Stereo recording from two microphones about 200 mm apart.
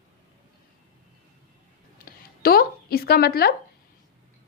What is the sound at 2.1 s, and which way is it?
Speech, 50° left (ahead or behind).